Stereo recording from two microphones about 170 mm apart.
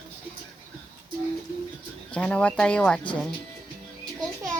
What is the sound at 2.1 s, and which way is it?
Speech, 5° left (ahead or behind).